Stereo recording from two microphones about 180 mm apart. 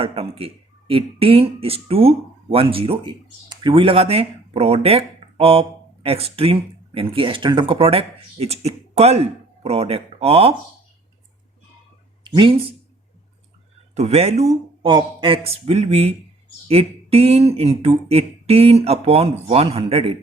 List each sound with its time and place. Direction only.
0.0 s speech: 30° right (ahead or behind)
12.2 s speech: 25° right (ahead or behind)
13.9 s speech: 35° right (ahead or behind)